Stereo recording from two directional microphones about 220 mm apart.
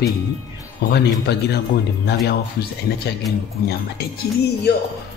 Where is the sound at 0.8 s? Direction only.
50° left (ahead or behind).